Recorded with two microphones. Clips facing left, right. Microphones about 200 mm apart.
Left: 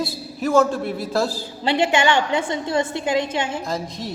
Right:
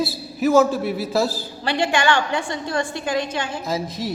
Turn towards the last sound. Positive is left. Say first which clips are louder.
# right 2 dB
turn(degrees=-5)  # may be behind; listen again after turning